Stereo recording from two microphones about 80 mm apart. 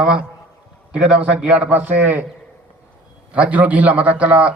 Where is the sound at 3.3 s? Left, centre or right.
Centre.